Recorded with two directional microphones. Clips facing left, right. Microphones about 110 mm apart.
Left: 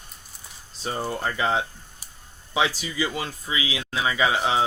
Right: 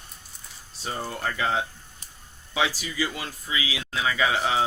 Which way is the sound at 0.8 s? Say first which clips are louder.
Left 3 dB; 20° left (ahead or behind).